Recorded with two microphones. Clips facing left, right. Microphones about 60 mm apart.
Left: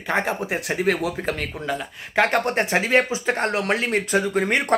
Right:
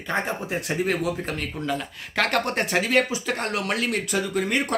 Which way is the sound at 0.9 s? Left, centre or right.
Left.